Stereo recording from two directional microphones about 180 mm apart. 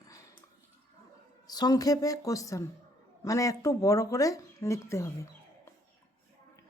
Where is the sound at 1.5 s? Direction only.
20° left (ahead or behind).